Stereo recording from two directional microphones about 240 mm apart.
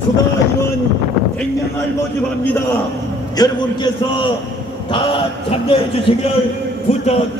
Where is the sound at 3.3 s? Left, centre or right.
Centre.